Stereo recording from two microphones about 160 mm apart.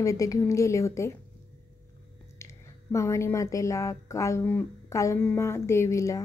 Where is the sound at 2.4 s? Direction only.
20° left (ahead or behind).